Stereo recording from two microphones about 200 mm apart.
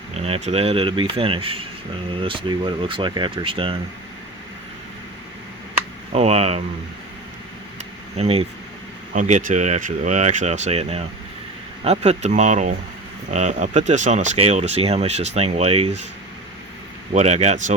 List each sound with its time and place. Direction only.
0.1 s speech: 35° right (ahead or behind)
6.1 s speech: 30° right (ahead or behind)
8.1 s speech: 30° right (ahead or behind)
17.2 s speech: 35° right (ahead or behind)